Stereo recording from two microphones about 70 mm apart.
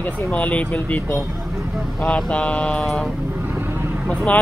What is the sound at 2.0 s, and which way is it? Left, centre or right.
Speech, centre.